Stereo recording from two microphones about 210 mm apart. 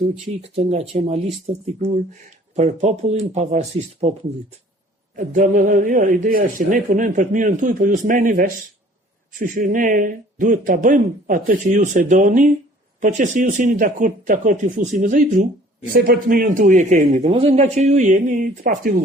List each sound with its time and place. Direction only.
0.1 s speech: 30° right (ahead or behind)
5.1 s speech: 35° right (ahead or behind)